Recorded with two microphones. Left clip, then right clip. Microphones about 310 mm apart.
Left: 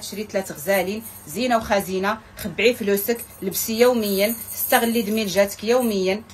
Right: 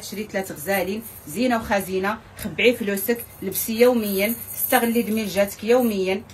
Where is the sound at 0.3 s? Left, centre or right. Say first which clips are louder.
Left 3 dB; centre.